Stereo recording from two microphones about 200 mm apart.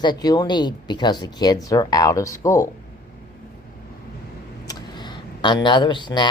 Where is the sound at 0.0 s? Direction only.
20° left (ahead or behind).